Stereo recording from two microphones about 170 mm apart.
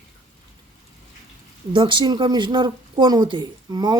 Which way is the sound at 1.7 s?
25° right (ahead or behind).